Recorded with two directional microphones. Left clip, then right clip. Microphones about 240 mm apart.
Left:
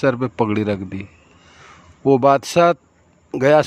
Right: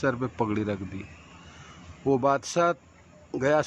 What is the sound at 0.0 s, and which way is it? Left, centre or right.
Speech, left.